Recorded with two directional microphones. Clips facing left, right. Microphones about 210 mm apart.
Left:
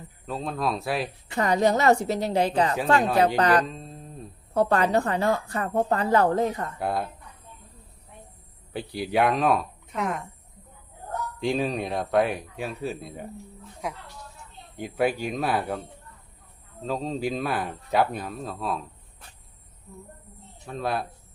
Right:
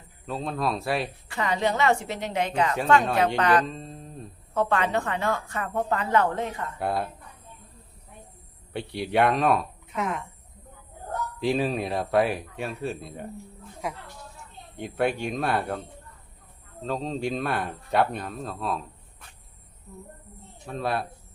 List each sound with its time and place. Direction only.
0.3 s speech: centre (ahead or behind)
1.4 s a woman's voice: 40° left (ahead or behind)
3.7 s a sound: centre (ahead or behind)
4.5 s a woman's voice: 40° left (ahead or behind)
6.7 s speech: centre (ahead or behind)
8.7 s speech: centre (ahead or behind)
11.3 s speech: centre (ahead or behind)
16.8 s speech: centre (ahead or behind)
20.7 s speech: centre (ahead or behind)